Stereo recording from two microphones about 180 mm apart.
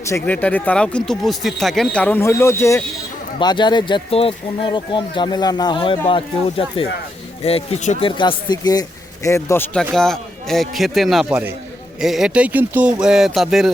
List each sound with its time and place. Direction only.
0.0 s speech: 10° left (ahead or behind); by 7.9 s 40° left (ahead or behind)
8.0 s speech: 25° left (ahead or behind); by 13.7 s centre (ahead or behind)